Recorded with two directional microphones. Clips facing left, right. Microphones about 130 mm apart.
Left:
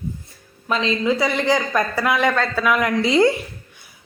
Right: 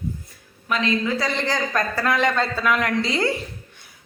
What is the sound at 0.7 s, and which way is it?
Speech, 25° left (ahead or behind).